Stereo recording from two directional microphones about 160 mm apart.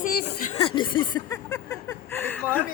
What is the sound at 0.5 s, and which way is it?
Speech, 30° left (ahead or behind).